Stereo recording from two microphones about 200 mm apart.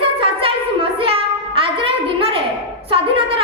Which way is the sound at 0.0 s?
25° right (ahead or behind).